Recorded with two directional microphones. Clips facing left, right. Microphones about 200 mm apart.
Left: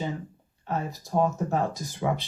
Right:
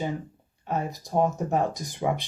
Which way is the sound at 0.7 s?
15° right (ahead or behind).